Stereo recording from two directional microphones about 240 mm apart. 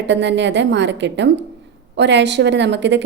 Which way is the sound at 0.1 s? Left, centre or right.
Right.